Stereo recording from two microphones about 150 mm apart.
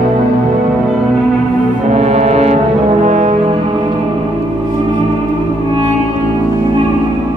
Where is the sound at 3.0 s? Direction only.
50° right (ahead or behind).